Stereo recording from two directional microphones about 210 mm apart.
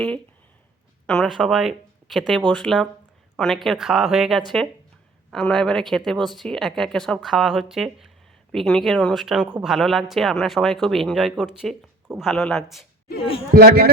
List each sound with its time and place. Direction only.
1.0 s speech: centre (ahead or behind)
13.5 s a man's voice: 45° right (ahead or behind)